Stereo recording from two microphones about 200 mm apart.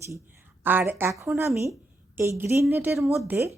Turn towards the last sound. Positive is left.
turn(degrees=-10)  # may be behind; listen again after turning